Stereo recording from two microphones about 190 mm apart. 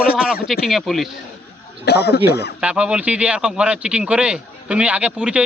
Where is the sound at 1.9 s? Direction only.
60° left (ahead or behind).